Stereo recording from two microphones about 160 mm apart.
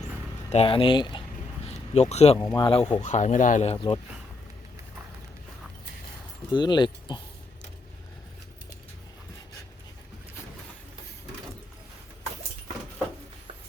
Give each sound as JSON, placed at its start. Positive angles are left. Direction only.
{"t": 0.5, "sound": "speech", "side_deg": 35}
{"t": 1.6, "sound": "a sound", "side_deg": 40}
{"t": 2.4, "sound": "speech", "side_deg": 25}
{"t": 2.6, "sound": "speech", "side_deg": 35}
{"t": 3.0, "sound": "speech", "side_deg": 50}
{"t": 3.8, "sound": "speech", "side_deg": 30}
{"t": 6.5, "sound": "speech", "side_deg": 30}